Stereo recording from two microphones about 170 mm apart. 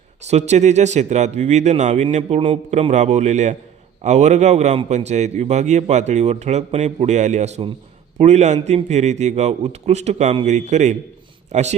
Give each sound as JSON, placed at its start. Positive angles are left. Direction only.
{"t": 0.2, "sound": "a man's voice", "side_deg": -40}